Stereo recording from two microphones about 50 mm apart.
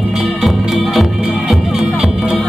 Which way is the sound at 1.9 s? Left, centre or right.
Centre.